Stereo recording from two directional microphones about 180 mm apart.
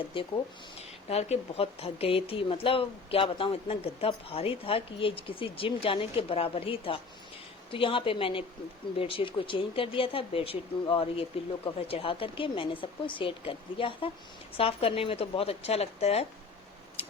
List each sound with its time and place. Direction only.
0.1 s speech: 30° left (ahead or behind)